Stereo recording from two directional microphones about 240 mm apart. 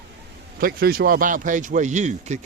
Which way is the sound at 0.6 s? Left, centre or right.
Right.